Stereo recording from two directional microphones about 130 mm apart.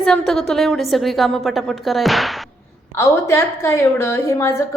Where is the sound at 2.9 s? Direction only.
20° left (ahead or behind).